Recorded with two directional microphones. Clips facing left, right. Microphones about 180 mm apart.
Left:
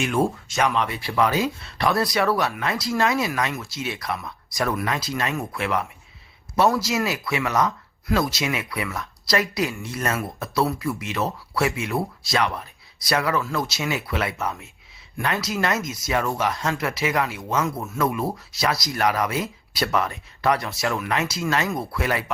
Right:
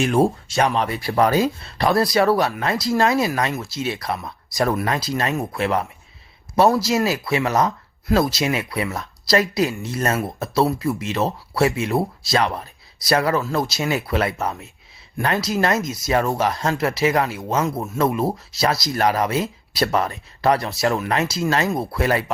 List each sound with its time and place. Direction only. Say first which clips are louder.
0.0 s speech: right 5 dB; 35° right (ahead or behind)